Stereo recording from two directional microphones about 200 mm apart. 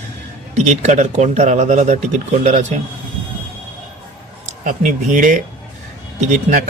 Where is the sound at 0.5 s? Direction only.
35° right (ahead or behind).